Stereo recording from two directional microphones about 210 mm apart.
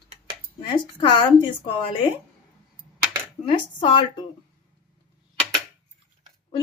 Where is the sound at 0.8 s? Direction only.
20° left (ahead or behind).